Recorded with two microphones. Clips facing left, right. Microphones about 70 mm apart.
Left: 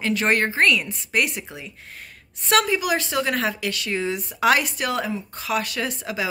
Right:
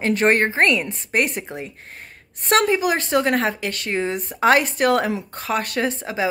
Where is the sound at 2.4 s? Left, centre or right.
Right.